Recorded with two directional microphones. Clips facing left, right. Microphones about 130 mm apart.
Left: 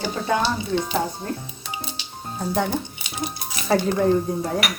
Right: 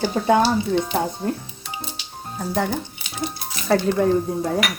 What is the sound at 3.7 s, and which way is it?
Speech, 5° left (ahead or behind).